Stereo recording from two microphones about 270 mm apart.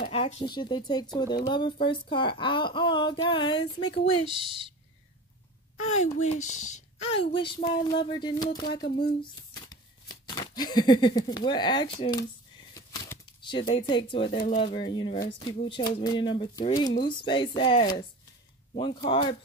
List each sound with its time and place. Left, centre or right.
0.0 s speech: left
4.3 s speech: centre
5.8 s speech: left